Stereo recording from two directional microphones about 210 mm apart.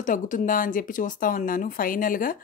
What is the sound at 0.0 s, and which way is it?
Speech, 40° left (ahead or behind).